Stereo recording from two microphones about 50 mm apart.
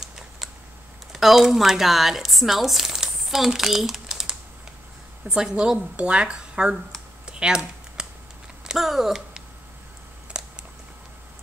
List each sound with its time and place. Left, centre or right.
1.1 s speech: centre
7.2 s computer keyboard: centre
8.6 s speech: centre
10.3 s a sound: right